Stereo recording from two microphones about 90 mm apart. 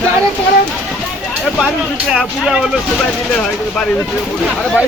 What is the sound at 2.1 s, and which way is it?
Speech, 5° right (ahead or behind).